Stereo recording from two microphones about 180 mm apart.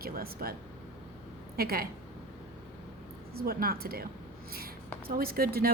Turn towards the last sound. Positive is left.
turn(degrees=-55)  # may be behind; listen again after turning